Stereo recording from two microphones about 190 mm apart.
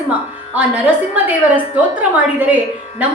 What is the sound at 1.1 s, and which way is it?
A woman's voice, 10° right (ahead or behind).